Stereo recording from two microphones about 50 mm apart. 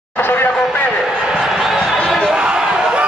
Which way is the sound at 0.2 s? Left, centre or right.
Left.